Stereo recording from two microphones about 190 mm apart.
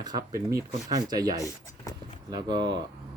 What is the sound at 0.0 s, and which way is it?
Speech, 20° right (ahead or behind).